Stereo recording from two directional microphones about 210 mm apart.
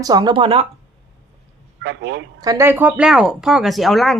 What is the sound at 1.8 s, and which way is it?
Speech, 60° right (ahead or behind).